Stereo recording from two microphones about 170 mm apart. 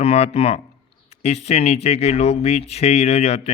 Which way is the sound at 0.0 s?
35° left (ahead or behind).